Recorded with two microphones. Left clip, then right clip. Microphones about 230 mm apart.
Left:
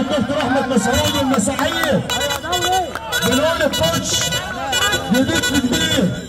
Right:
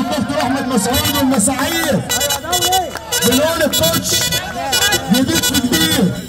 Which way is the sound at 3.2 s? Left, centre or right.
Right.